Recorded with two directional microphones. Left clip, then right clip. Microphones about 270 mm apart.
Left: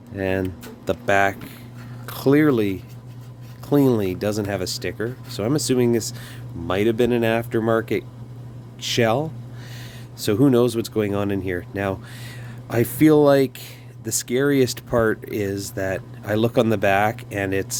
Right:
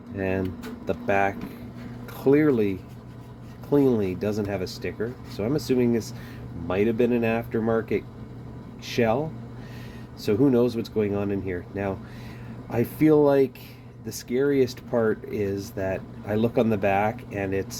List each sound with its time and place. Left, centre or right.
0.2 s speech: left
10.2 s speech: left